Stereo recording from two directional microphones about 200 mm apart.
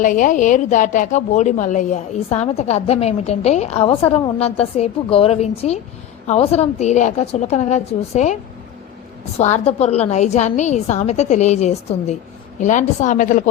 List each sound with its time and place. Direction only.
0.0 s a woman's voice: 40° left (ahead or behind)
9.4 s a woman's voice: 30° left (ahead or behind)